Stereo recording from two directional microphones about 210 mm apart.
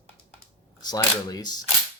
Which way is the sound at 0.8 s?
20° left (ahead or behind).